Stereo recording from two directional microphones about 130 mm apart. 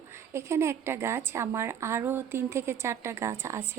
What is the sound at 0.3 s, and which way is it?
Speech, 20° right (ahead or behind).